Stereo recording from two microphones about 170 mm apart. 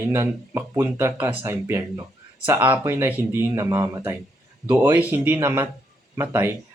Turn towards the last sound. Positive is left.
turn(degrees=-15)  # may be behind; listen again after turning